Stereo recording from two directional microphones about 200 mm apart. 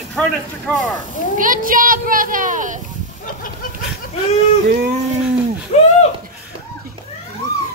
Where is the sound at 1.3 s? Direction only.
45° right (ahead or behind).